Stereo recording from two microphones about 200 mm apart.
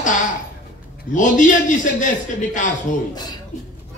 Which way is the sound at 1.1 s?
40° left (ahead or behind).